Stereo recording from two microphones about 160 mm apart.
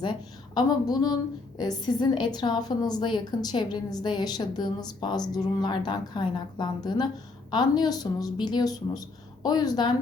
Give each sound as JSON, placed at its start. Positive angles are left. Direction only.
{"t": 0.0, "sound": "a woman's voice", "side_deg": 25}